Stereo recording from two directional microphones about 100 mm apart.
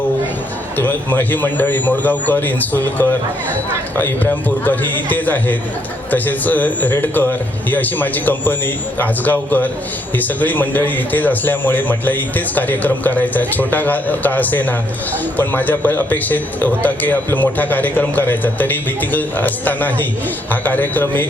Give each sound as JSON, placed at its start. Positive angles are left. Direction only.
{"t": 0.8, "sound": "a man's voice", "side_deg": 20}